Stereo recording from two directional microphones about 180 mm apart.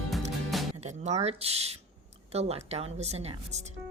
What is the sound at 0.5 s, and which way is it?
Music, centre (ahead or behind).